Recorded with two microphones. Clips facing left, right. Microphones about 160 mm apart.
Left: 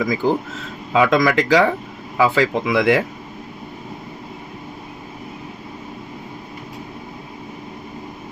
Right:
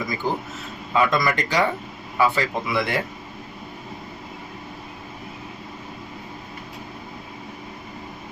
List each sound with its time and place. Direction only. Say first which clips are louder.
0.0 s speech: left 7 dB; 90° left